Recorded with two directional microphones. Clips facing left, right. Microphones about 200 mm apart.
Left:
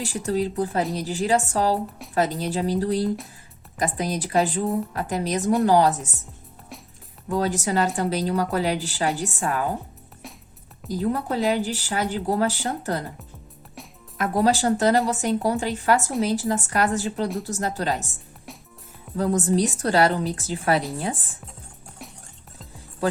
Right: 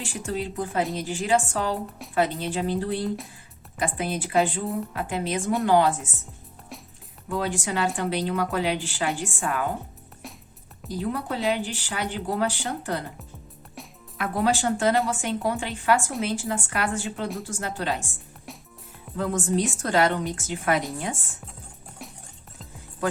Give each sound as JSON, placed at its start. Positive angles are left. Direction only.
{"t": 0.3, "sound": "a woman's voice", "side_deg": 35}
{"t": 7.3, "sound": "a woman's voice", "side_deg": 40}
{"t": 10.2, "sound": "music", "side_deg": 0}
{"t": 10.8, "sound": "a woman's voice", "side_deg": 40}
{"t": 14.2, "sound": "a woman's voice", "side_deg": 40}
{"t": 19.1, "sound": "a woman's voice", "side_deg": 40}